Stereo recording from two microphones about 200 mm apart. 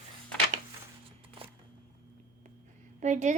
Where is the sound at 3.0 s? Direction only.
35° right (ahead or behind).